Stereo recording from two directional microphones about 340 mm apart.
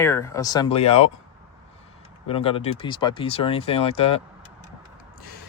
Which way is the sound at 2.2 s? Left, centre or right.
Centre.